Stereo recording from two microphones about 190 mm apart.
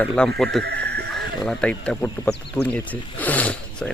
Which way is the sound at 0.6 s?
60° right (ahead or behind).